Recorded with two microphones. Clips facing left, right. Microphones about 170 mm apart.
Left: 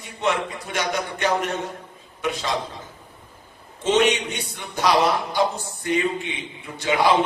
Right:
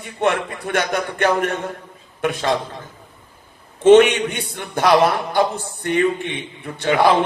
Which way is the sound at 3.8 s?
55° right (ahead or behind).